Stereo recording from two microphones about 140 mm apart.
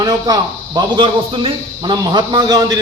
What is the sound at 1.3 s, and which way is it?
A man's voice, 40° right (ahead or behind).